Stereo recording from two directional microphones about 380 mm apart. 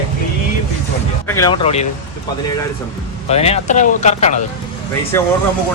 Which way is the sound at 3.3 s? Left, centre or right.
Centre.